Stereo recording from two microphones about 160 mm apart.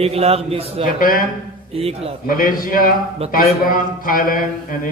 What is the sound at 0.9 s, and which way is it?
Speech, 60° left (ahead or behind).